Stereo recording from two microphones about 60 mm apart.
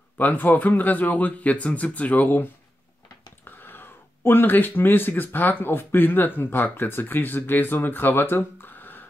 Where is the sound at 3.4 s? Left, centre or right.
Left.